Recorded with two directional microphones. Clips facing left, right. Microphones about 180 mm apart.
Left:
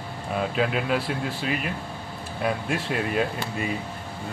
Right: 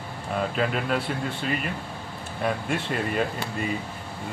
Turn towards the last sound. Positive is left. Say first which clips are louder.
# left 1 dB
turn(degrees=0)  # may be behind; listen again after turning